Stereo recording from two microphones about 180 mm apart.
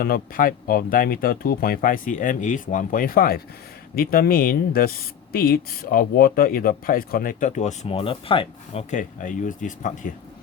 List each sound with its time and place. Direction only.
0.0 s speech: 55° left (ahead or behind)